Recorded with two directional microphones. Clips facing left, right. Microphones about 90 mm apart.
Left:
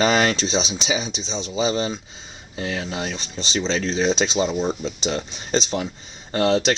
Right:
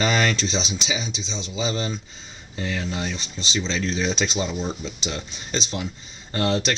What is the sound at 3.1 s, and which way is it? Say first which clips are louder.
Speech: left 2 dB; 30° left (ahead or behind).